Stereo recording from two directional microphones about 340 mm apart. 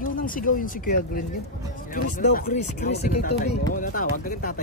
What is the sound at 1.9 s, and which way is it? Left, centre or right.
Speech, left.